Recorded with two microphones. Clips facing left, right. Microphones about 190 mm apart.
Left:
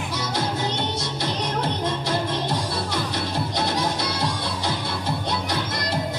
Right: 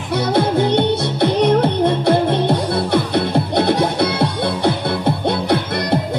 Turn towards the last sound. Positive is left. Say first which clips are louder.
# right 10 dB
turn(degrees=-60)  # may be behind; listen again after turning